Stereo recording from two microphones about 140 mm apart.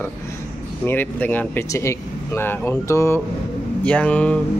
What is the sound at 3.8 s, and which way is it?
Speech, 10° left (ahead or behind).